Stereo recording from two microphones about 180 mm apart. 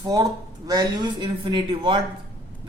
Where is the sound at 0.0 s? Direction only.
20° right (ahead or behind).